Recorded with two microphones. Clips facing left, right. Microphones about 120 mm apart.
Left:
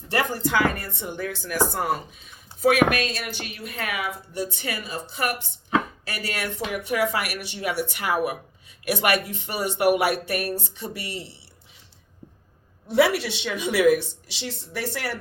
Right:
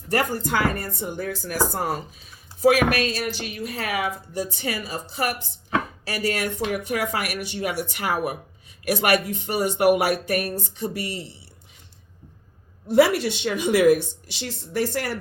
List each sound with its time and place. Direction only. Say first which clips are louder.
0.1 s speech: right 1 dB; 45° right (ahead or behind)
12.9 s speech: right 3 dB; 50° right (ahead or behind)